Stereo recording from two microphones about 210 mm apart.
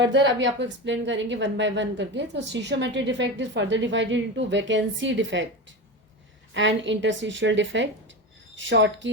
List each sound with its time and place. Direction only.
0.0 s a woman's voice: 60° right (ahead or behind)